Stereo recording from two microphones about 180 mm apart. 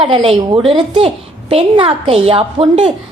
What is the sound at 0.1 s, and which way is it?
A woman's voice, 30° right (ahead or behind).